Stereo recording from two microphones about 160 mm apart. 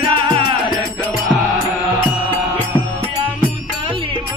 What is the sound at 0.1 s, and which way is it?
Music, 35° right (ahead or behind).